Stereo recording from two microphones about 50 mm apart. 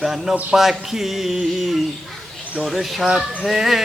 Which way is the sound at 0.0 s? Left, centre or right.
Centre.